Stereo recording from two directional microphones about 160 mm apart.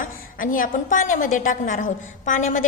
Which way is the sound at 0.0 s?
60° left (ahead or behind).